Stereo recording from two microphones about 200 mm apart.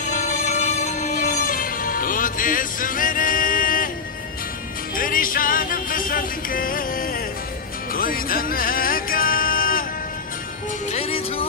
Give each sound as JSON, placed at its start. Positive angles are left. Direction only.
{"t": 0.1, "sound": "music", "side_deg": 35}
{"t": 4.9, "sound": "music", "side_deg": 45}
{"t": 10.9, "sound": "music", "side_deg": 30}